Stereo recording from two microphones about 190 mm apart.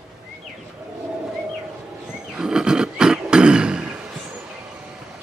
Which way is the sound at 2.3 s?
5° right (ahead or behind).